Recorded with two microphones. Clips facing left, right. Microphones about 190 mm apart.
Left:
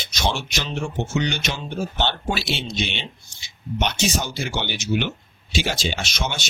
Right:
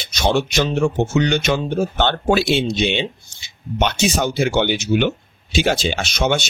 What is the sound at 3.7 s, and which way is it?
Speech, 60° right (ahead or behind).